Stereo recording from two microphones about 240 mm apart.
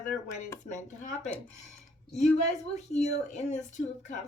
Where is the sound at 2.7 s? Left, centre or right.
Left.